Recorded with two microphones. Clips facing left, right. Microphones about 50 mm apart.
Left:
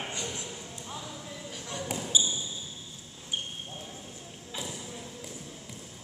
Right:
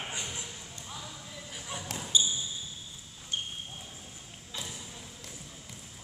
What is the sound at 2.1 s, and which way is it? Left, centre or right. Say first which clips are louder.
Basketball bounce: even; centre.